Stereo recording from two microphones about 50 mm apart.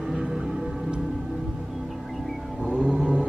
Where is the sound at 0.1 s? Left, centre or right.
Centre.